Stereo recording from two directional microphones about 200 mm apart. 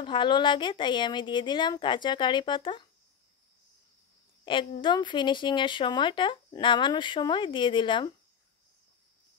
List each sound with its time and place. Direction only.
0.0 s speech: 25° left (ahead or behind)
4.5 s speech: 25° left (ahead or behind)